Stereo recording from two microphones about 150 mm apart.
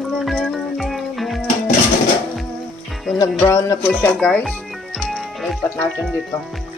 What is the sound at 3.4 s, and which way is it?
Music, 20° left (ahead or behind).